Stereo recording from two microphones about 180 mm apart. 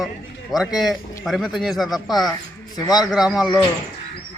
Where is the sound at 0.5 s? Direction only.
Centre (ahead or behind).